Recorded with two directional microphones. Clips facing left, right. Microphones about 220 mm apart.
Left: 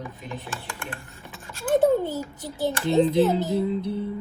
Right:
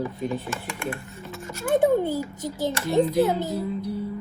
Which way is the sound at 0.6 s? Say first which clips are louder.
Right 6 dB; 15° right (ahead or behind).